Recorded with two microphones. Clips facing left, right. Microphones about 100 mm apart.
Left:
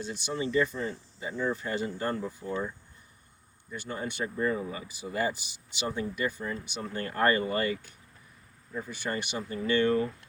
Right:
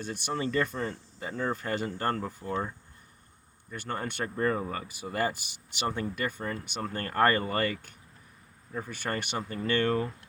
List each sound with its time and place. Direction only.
0.0 s speech: 55° right (ahead or behind)
3.7 s speech: 55° right (ahead or behind)